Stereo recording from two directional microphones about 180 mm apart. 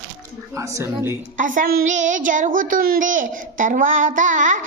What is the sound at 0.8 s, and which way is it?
Speech, 15° right (ahead or behind).